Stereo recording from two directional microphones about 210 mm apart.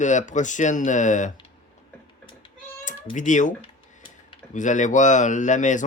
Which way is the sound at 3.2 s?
35° left (ahead or behind).